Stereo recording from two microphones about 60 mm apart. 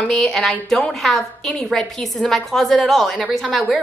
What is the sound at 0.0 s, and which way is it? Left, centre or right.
A woman's voice, centre.